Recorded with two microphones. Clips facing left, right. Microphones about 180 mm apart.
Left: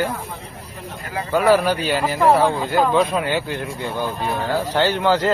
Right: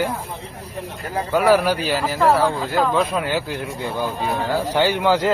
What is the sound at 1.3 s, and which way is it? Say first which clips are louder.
A man's voice: even; 10° right (ahead or behind).